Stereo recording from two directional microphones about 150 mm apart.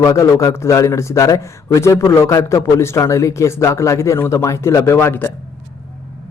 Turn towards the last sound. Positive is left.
turn(degrees=15)  # may be behind; listen again after turning